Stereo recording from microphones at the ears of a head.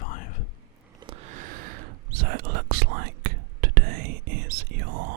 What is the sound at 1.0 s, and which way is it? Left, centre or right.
Whispering, right.